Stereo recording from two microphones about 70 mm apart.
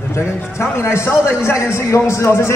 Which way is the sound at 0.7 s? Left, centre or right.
Left.